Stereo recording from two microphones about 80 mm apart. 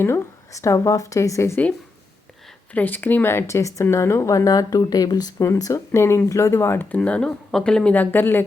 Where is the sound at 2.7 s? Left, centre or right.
Left.